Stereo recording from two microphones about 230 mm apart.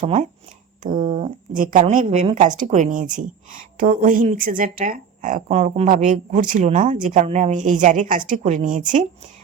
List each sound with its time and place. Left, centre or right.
0.0 s speech: right